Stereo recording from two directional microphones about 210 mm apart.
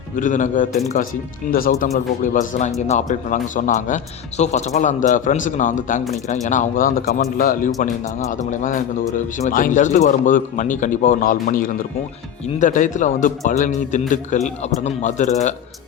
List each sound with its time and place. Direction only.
0.2 s speech: 40° left (ahead or behind)